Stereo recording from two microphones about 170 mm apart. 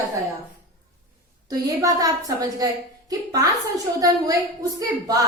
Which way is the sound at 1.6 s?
20° right (ahead or behind).